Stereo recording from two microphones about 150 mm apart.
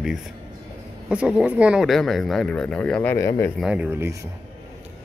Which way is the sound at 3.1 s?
20° left (ahead or behind).